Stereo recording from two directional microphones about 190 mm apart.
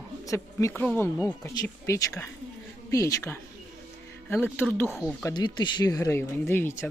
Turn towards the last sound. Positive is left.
turn(degrees=10)  # may be behind; listen again after turning